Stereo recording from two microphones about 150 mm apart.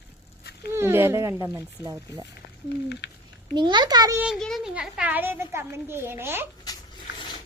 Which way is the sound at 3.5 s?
30° right (ahead or behind).